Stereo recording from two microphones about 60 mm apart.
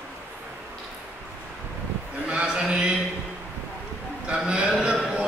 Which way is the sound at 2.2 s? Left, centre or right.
Centre.